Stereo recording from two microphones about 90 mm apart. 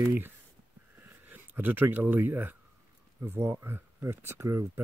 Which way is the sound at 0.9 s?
20° right (ahead or behind).